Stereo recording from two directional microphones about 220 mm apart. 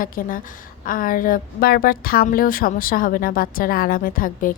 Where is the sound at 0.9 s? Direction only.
40° left (ahead or behind).